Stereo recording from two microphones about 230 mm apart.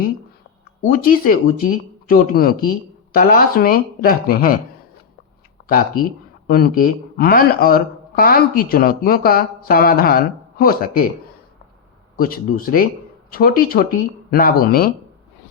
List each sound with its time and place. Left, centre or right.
0.9 s speech: left
5.6 s speech: left
12.1 s speech: left